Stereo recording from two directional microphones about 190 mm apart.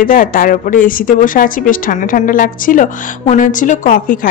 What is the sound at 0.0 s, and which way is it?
A woman's voice, 45° left (ahead or behind).